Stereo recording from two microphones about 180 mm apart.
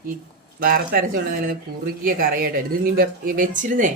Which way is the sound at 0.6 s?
55° right (ahead or behind).